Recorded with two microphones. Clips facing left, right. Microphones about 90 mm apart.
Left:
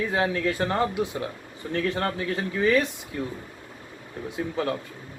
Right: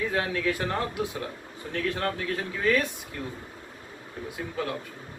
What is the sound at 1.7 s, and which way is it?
Speech, 20° left (ahead or behind).